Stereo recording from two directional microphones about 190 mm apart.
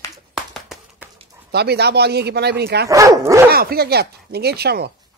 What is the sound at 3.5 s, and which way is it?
Speech, 55° right (ahead or behind).